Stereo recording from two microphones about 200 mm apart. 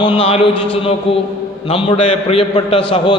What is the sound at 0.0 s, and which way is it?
A man's voice, 30° left (ahead or behind).